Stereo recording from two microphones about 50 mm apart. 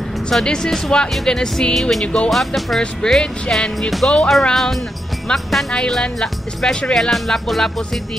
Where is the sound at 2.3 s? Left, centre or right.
Centre.